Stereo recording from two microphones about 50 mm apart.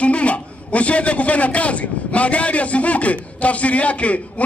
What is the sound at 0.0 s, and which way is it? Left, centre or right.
A man's voice, left.